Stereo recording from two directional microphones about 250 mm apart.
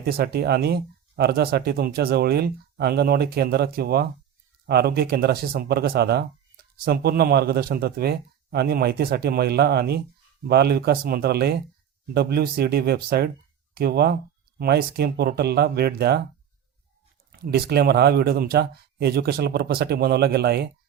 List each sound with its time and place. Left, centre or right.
0.0 s speech: right
17.3 s speech: right